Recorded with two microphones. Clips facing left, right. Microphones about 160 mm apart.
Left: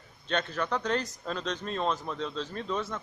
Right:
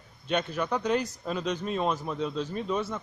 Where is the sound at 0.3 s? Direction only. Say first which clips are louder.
Right 2 dB; 10° right (ahead or behind).